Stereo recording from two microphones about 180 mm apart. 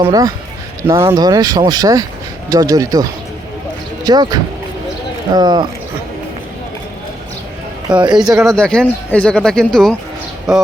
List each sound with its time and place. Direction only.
0.0 s speech: 20° right (ahead or behind)
7.9 s speech: 25° right (ahead or behind)
8.4 s speech: 5° left (ahead or behind)